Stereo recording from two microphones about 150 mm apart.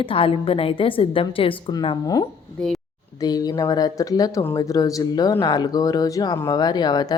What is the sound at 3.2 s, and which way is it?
Speech, 25° left (ahead or behind).